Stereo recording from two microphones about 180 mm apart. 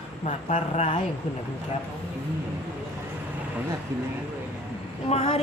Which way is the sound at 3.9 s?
15° right (ahead or behind).